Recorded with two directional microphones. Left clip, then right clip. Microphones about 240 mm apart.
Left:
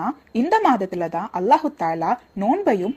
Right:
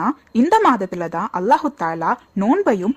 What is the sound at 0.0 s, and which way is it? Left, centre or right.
A woman's voice, centre.